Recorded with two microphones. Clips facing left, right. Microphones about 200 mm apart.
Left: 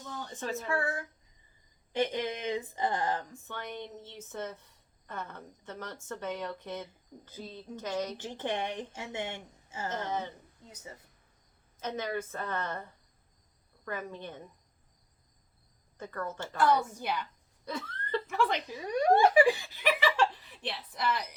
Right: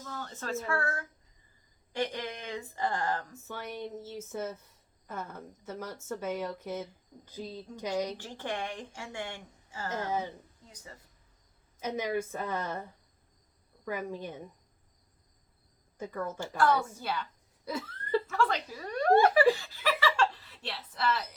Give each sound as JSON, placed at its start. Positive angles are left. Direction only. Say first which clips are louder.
{"t": 0.1, "sound": "a woman's voice", "louder": "even", "side_deg": 15}
{"t": 3.4, "sound": "a woman's voice", "louder": "right 2 dB", "side_deg": -10}
{"t": 8.2, "sound": "a woman's voice", "louder": "left 2 dB", "side_deg": 20}
{"t": 9.9, "sound": "a woman's voice", "louder": "right 2 dB", "side_deg": -10}
{"t": 11.8, "sound": "a woman's voice", "louder": "right 3 dB", "side_deg": -10}
{"t": 16.0, "sound": "a woman's voice", "louder": "right 2 dB", "side_deg": -10}
{"t": 17.0, "sound": "speech", "louder": "left 1 dB", "side_deg": 15}
{"t": 17.7, "sound": "a sound", "louder": "right 3 dB", "side_deg": -5}
{"t": 18.3, "sound": "speech", "louder": "even", "side_deg": 15}
{"t": 18.8, "sound": "laughter", "louder": "even", "side_deg": 15}